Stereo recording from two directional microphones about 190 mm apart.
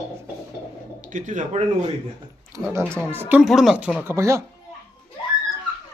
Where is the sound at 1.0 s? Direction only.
40° right (ahead or behind).